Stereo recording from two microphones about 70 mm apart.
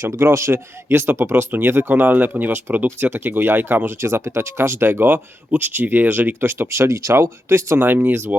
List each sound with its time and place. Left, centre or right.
0.0 s speech: right
4.0 s speech: right
7.9 s speech: right